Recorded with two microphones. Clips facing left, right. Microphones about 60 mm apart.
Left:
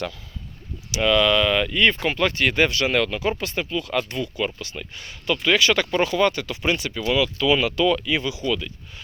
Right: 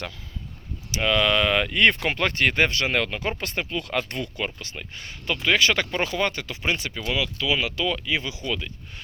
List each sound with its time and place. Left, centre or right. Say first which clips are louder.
1.0 s speech: left 3 dB; right
3.2 s speech: left 3 dB; right
4.4 s speech: left 3 dB; right
7.3 s speech: left 5 dB; centre
8.3 s speech: left 5 dB; right